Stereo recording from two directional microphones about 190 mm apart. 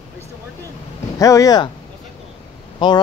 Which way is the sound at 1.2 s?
15° left (ahead or behind).